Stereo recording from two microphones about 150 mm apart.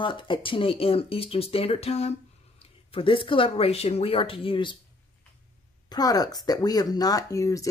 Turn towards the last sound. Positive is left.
turn(degrees=20)  # may be behind; listen again after turning